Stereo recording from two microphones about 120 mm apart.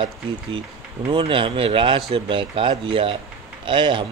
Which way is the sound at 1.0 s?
45° right (ahead or behind).